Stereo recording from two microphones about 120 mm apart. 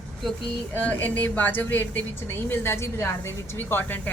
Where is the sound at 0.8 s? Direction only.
15° left (ahead or behind).